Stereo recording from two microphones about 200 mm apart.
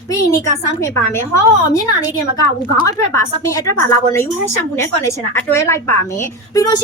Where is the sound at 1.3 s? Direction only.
20° left (ahead or behind).